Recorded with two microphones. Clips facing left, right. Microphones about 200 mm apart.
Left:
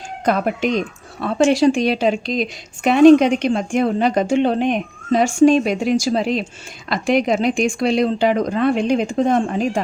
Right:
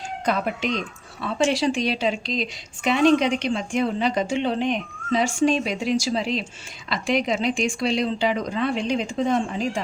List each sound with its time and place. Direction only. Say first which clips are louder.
0.3 s speech: left 6 dB; 50° left (ahead or behind)